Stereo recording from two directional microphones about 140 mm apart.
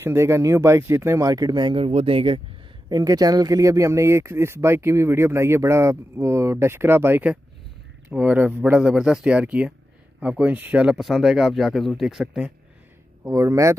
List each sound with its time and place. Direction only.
0.0 s speech: 20° right (ahead or behind)
1.9 s speech: 45° right (ahead or behind)
2.9 s speech: 25° right (ahead or behind); by 12.5 s 5° right (ahead or behind)
13.2 s speech: 20° right (ahead or behind)